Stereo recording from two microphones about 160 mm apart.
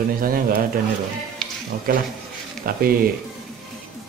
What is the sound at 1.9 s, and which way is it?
Speech, 60° right (ahead or behind).